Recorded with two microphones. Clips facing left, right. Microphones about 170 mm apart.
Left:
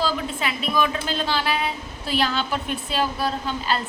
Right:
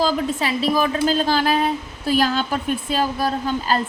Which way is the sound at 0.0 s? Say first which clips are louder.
Right 5 dB; 35° right (ahead or behind).